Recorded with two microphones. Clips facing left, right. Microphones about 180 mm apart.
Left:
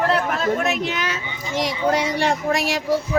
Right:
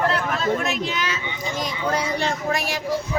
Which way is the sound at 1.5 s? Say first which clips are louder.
Left 5 dB; 85° left.